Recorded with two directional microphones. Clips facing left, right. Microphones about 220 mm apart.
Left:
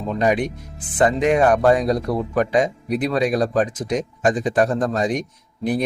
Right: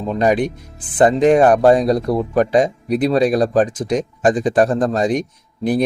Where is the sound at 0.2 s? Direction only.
35° right (ahead or behind).